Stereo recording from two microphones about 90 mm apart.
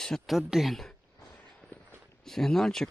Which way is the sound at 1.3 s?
15° left (ahead or behind).